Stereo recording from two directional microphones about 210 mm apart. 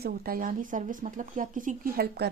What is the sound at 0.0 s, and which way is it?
Speech, 45° right (ahead or behind).